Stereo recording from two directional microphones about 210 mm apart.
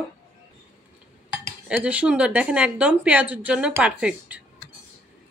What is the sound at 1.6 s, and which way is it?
Speech, 5° right (ahead or behind).